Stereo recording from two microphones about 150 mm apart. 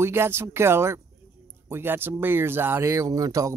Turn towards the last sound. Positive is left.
turn(degrees=-20)  # may be behind; listen again after turning